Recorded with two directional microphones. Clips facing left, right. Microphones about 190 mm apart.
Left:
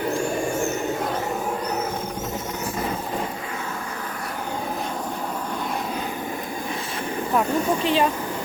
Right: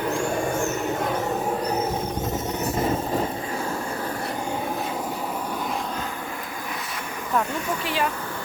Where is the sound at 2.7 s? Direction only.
25° right (ahead or behind).